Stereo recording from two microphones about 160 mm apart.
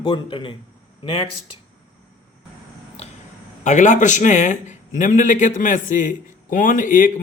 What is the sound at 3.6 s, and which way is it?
Speech, 50° left (ahead or behind).